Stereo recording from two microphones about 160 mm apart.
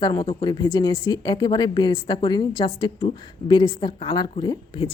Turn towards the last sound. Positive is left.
turn(degrees=25)  # may be behind; listen again after turning